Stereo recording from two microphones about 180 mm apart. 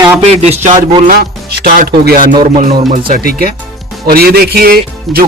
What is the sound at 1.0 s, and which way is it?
Speech, 60° right (ahead or behind).